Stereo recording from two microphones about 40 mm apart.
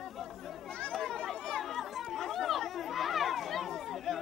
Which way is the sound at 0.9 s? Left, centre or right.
Centre.